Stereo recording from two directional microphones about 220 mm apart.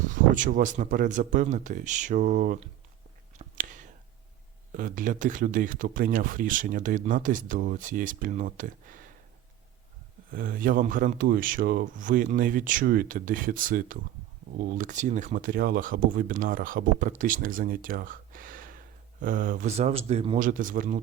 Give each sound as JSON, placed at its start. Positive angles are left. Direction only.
{"t": 0.0, "sound": "speech", "side_deg": -35}
{"t": 3.3, "sound": "whispering", "side_deg": -35}
{"t": 4.7, "sound": "speech", "side_deg": -40}
{"t": 10.3, "sound": "speech", "side_deg": -40}